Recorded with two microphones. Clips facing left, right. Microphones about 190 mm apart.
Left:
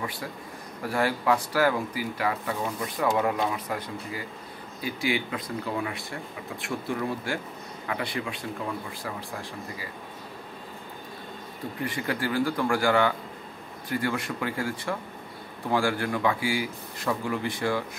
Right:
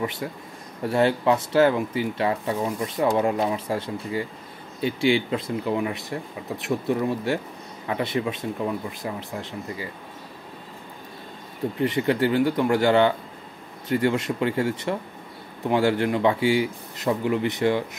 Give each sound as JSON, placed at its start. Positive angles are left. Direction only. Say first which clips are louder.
{"t": 0.0, "sound": "a man's voice", "louder": "right 5 dB", "side_deg": -25}
{"t": 11.8, "sound": "a man's voice", "louder": "right 8 dB", "side_deg": -25}